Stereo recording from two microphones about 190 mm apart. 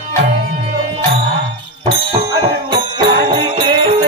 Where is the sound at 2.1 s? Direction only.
20° right (ahead or behind).